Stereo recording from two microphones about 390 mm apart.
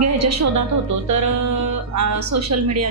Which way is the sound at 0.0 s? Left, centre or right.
Right.